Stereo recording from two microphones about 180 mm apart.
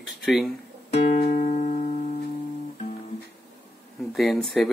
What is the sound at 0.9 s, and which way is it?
Music, 45° left (ahead or behind).